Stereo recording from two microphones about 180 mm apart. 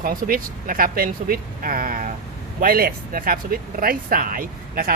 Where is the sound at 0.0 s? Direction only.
50° right (ahead or behind).